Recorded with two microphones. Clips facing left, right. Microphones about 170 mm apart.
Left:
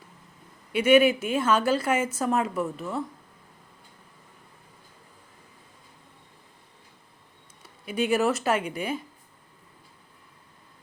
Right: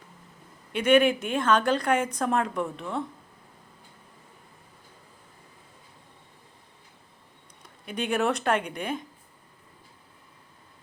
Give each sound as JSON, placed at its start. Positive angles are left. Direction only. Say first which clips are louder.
{"t": 0.7, "sound": "a woman's voice", "louder": "left 2 dB", "side_deg": 10}
{"t": 7.6, "sound": "a woman's voice", "louder": "left 5 dB", "side_deg": 5}